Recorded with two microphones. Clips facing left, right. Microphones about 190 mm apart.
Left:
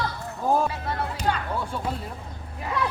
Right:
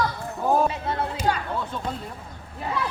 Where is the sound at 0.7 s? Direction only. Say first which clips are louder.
Right 2 dB; 20° right (ahead or behind).